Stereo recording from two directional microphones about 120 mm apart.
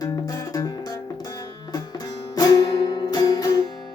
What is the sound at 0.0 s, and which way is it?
Music, 30° left (ahead or behind).